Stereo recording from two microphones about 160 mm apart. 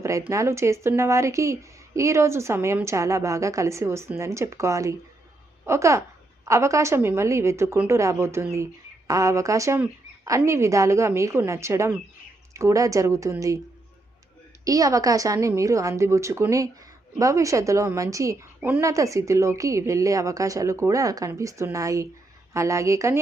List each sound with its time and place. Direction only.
0.0 s a woman's voice: 20° right (ahead or behind)
14.6 s a woman's voice: 20° right (ahead or behind)